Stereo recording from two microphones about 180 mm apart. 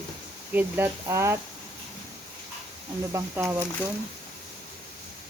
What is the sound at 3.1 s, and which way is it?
Speech, 15° right (ahead or behind).